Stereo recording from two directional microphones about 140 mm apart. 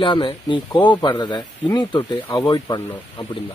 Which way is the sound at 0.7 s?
10° left (ahead or behind).